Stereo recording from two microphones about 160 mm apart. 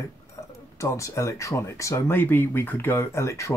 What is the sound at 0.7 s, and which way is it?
Speech, 20° left (ahead or behind).